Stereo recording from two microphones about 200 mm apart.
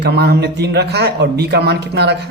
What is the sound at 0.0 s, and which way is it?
Speech, 55° right (ahead or behind).